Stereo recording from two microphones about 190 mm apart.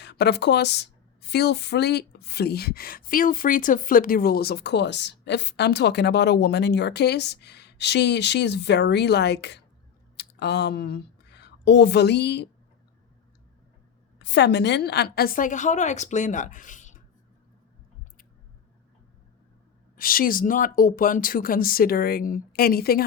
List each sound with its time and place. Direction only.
0.0 s a woman's voice: 60° left (ahead or behind)
14.2 s speech: 65° left (ahead or behind); by 17.0 s 40° left (ahead or behind)
20.0 s speech: 50° left (ahead or behind)